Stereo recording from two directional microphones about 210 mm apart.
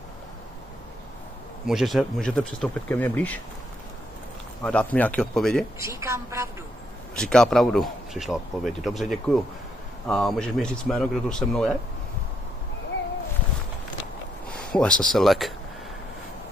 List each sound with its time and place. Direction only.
1.7 s speech: centre (ahead or behind)
4.6 s speech: 5° left (ahead or behind)
5.8 s a woman's voice: 15° right (ahead or behind)
7.2 s speech: 5° left (ahead or behind)
14.5 s speech: 5° left (ahead or behind)